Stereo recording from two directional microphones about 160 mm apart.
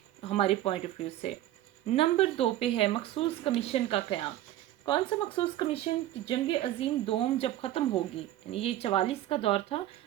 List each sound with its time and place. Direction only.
0.3 s speech: 40° left (ahead or behind)
1.9 s speech: 35° left (ahead or behind)